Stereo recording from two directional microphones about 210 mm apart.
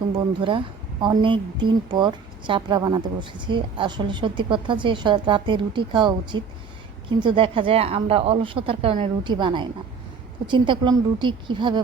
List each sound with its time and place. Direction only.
0.1 s a woman's voice: 20° right (ahead or behind)